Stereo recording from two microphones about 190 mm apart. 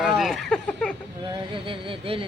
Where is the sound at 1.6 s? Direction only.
25° right (ahead or behind).